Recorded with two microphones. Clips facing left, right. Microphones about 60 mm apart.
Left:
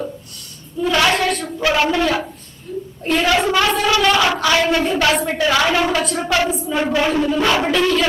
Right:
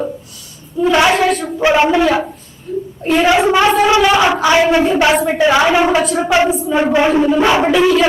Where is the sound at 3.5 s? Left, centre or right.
Right.